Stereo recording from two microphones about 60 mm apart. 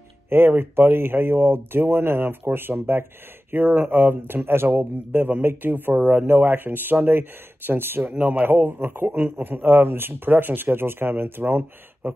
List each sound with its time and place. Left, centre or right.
0.3 s a man's voice: right
5.1 s a man's voice: right
8.1 s a man's voice: right